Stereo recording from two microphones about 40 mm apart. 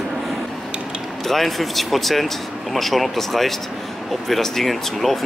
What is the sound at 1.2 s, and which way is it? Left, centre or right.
Speech, centre.